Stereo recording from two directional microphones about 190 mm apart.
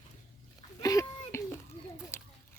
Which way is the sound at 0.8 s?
15° left (ahead or behind).